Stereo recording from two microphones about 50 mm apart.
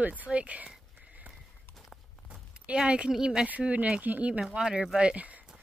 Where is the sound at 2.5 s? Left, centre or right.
Right.